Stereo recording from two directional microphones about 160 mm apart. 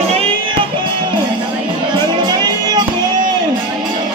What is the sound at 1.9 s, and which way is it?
Music, 25° right (ahead or behind).